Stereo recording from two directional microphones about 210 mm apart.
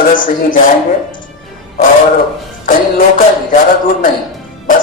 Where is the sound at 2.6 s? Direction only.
40° left (ahead or behind).